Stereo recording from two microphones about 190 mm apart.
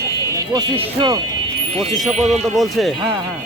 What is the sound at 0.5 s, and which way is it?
Speech, 25° right (ahead or behind).